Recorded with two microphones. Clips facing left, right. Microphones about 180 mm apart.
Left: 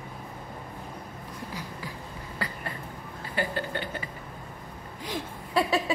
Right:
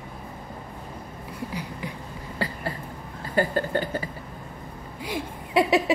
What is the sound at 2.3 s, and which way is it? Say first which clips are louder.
Cough: right 6 dB; 30° right (ahead or behind).